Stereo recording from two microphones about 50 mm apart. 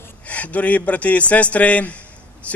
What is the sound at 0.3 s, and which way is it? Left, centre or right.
A man's voice, left.